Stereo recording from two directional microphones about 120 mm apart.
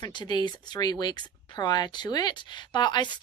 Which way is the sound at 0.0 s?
35° left (ahead or behind).